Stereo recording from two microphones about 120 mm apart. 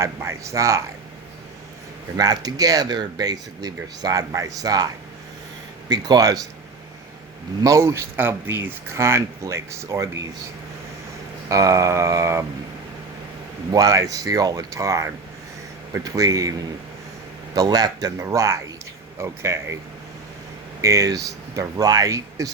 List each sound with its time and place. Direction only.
0.0 s speech: 25° right (ahead or behind)
2.1 s speech: 35° right (ahead or behind)
5.9 s speech: 30° right (ahead or behind)
7.6 s speech: 25° right (ahead or behind)
11.4 s speech: 25° right (ahead or behind)
13.7 s speech: 30° right (ahead or behind)
20.8 s speech: 25° right (ahead or behind)